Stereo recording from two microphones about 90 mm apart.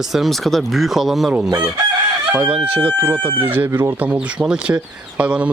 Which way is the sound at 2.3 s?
15° right (ahead or behind).